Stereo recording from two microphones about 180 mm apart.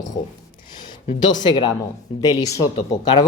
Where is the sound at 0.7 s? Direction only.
25° left (ahead or behind).